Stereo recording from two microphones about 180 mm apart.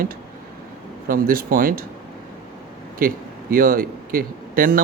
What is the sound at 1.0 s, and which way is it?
Speech, 55° right (ahead or behind).